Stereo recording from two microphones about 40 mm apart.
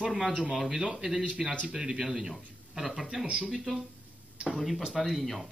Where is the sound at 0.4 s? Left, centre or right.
Centre.